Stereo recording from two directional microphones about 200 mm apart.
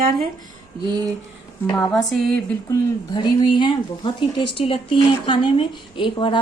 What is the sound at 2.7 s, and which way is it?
Speech, 20° left (ahead or behind).